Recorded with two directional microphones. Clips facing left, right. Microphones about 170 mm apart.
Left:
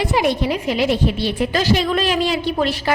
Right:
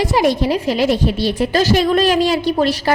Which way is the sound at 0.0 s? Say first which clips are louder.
Right 3 dB; 40° right (ahead or behind).